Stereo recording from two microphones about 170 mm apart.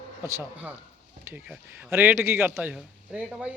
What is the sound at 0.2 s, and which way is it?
Speech, 15° right (ahead or behind).